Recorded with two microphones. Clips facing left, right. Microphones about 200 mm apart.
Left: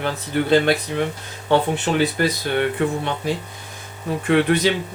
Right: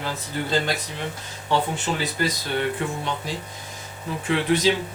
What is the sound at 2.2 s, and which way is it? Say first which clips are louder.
Speech: left 4 dB; 60° left (ahead or behind).